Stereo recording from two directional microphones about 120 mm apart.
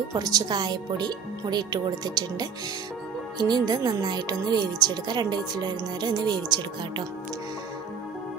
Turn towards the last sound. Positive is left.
turn(degrees=-35)  # may be behind; listen again after turning